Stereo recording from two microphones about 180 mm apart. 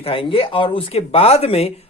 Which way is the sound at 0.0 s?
30° left (ahead or behind).